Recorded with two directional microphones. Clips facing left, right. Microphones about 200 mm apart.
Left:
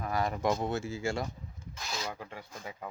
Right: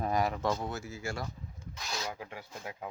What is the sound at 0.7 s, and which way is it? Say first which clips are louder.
Speech: left 6 dB; 25° left (ahead or behind).